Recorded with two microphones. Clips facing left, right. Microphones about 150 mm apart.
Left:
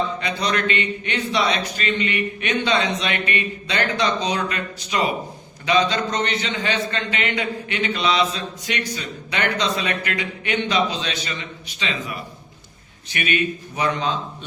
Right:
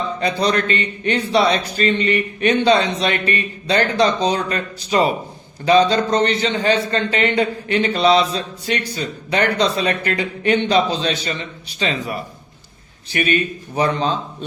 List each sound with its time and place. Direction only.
0.2 s a man's voice: 35° right (ahead or behind)